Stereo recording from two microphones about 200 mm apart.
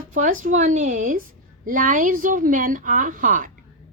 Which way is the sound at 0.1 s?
40° right (ahead or behind).